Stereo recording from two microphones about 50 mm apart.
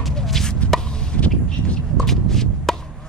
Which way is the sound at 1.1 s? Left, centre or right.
Left.